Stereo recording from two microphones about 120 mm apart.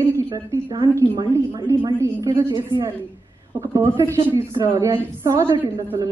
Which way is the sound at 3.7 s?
25° right (ahead or behind).